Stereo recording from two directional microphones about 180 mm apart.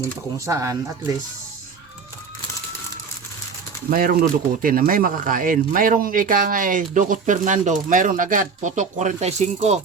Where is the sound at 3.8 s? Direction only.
55° right (ahead or behind).